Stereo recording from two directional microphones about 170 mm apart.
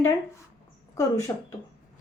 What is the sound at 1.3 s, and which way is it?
Speech, 20° left (ahead or behind).